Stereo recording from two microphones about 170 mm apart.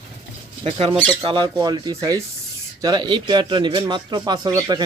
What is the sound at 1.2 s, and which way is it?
A man's voice, 25° right (ahead or behind).